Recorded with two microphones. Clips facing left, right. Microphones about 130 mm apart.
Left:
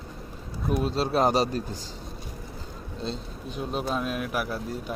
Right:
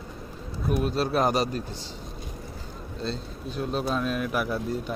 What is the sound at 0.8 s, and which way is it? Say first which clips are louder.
Speech: left 1 dB; 25° left (ahead or behind).